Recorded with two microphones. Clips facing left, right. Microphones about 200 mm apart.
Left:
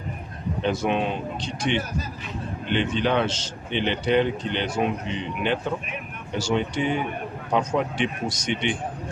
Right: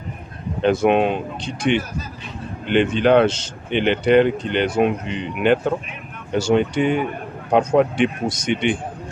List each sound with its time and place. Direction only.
0.6 s speech: 60° right (ahead or behind)
2.7 s speech: 55° right (ahead or behind)